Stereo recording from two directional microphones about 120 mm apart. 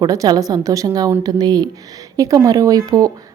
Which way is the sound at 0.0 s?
30° right (ahead or behind).